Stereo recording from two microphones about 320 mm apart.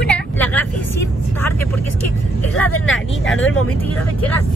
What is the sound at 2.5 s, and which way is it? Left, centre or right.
Speech, left.